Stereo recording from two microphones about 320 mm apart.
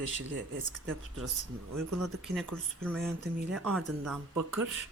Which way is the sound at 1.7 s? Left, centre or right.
Right.